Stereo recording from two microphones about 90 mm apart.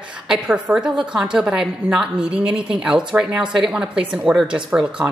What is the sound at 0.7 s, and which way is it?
A woman's voice, 5° right (ahead or behind).